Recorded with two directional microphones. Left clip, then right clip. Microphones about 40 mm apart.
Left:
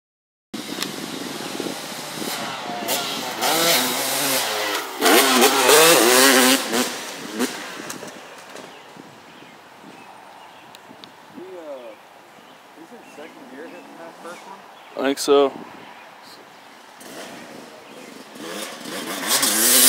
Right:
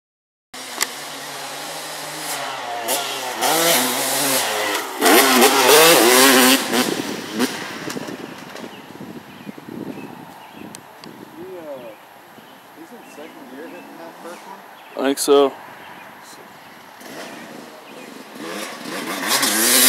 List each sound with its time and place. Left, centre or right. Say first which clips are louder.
0.5 s a sound: left 1 dB; centre
0.8 s vehicle: even; centre; by 8.6 s left
15.0 s speech: right 2 dB; centre
18.4 s vehicle: right 2 dB; left